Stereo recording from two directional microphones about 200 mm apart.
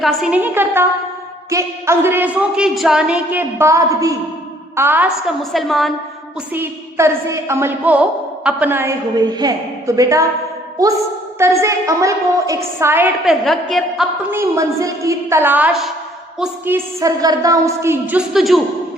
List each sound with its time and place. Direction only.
0.0 s a woman's voice: centre (ahead or behind)
5.4 s a woman's voice: centre (ahead or behind)
6.5 s a woman's voice: 10° right (ahead or behind)
11.3 s a woman's voice: 15° right (ahead or behind)
13.2 s a woman's voice: centre (ahead or behind)
14.3 s a woman's voice: 15° right (ahead or behind)